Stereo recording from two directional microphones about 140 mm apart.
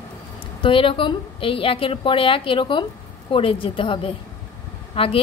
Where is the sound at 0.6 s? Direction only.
35° left (ahead or behind).